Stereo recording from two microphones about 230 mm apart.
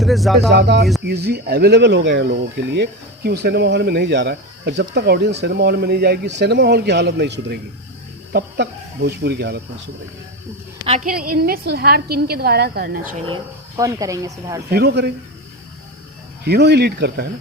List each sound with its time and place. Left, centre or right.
0.0 s music: centre
0.5 s speech: right
10.8 s speech: right
13.2 s speech: centre
14.7 s speech: right
16.4 s speech: right